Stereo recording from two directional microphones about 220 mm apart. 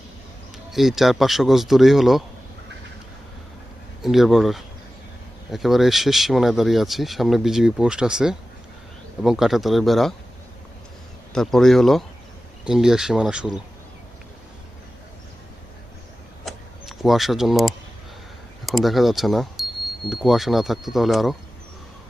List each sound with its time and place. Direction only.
0.7 s speech: centre (ahead or behind)
4.0 s speech: centre (ahead or behind)
11.3 s speech: centre (ahead or behind)
16.5 s vehicle: centre (ahead or behind)
18.6 s speech: centre (ahead or behind)